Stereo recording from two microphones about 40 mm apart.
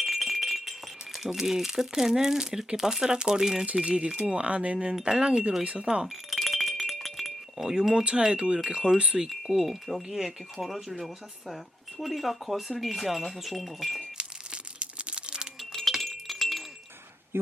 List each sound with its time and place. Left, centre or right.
0.0 s rattle: centre
1.2 s speech: centre; by 4.9 s right
4.9 s speech: centre
6.3 s music: centre
7.6 s speech: centre
9.2 s speech: centre
14.2 s crumpling: right
15.9 s wind chime: centre